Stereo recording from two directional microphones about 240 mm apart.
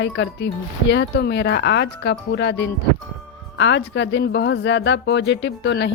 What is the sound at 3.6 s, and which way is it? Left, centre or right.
Speech, left.